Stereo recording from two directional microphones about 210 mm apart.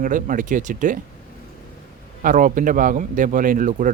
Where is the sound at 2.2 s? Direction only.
40° right (ahead or behind).